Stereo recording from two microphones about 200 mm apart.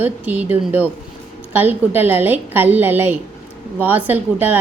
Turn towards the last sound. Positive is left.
turn(degrees=-10)  # may be behind; listen again after turning